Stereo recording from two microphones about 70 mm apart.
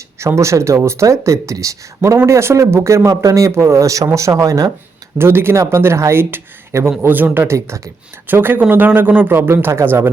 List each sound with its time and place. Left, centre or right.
0.2 s speech: right
5.1 s speech: right
7.1 s speech: right
7.4 s speech: right
8.3 s speech: right